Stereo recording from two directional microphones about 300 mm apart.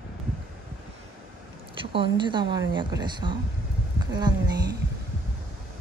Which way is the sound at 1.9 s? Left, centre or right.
Centre.